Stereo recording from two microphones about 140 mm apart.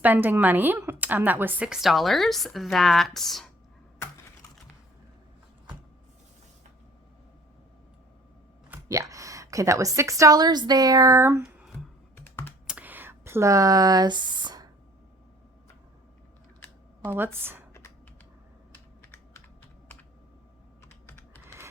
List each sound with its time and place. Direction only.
0.0 s a woman's voice: 15° right (ahead or behind)
8.9 s a woman's voice: 25° right (ahead or behind)
12.1 s computer keyboard: 15° left (ahead or behind)
12.6 s a sound: 10° right (ahead or behind); by 14.7 s 30° right (ahead or behind)
17.0 s a woman's voice: 15° right (ahead or behind)